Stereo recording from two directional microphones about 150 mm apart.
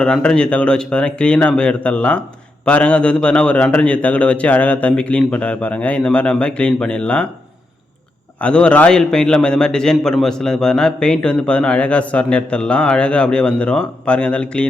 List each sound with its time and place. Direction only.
0.0 s a man's voice: 5° left (ahead or behind)
8.4 s a man's voice: 5° left (ahead or behind)